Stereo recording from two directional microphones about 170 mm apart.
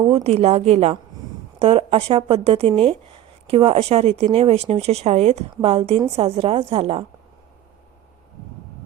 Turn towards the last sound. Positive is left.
turn(degrees=-35)  # may be behind; listen again after turning